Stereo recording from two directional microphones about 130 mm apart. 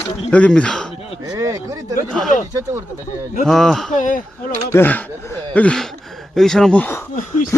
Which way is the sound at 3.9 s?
85° left.